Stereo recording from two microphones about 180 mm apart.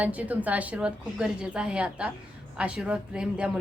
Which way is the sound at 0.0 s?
10° right (ahead or behind).